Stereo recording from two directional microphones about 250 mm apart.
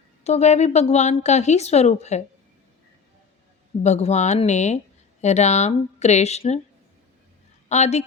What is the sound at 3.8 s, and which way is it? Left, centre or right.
A woman's voice, left.